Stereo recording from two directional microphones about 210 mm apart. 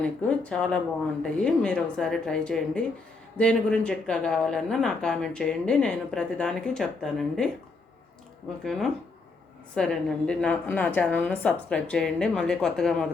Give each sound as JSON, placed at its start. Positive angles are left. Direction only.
{"t": 0.0, "sound": "speech", "side_deg": 5}
{"t": 8.6, "sound": "speech", "side_deg": 0}